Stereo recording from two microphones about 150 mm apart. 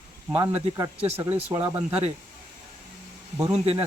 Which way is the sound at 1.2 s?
15° right (ahead or behind).